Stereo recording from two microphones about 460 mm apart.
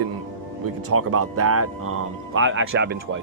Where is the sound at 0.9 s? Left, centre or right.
Right.